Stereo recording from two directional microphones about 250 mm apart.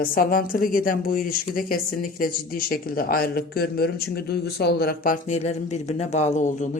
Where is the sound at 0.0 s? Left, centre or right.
Left.